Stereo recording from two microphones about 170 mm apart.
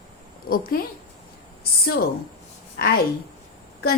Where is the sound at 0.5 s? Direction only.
60° left (ahead or behind).